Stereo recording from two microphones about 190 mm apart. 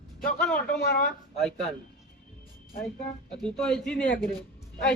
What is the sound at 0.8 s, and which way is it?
Speech, 60° left (ahead or behind).